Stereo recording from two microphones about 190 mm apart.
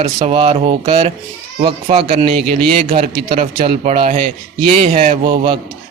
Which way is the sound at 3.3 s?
35° right (ahead or behind).